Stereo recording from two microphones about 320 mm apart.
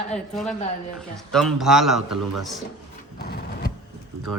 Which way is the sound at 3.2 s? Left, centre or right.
Left.